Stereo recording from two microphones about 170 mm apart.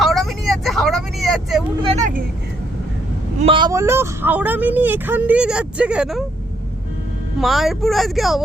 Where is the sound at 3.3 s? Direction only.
30° right (ahead or behind); by 6.2 s 5° right (ahead or behind).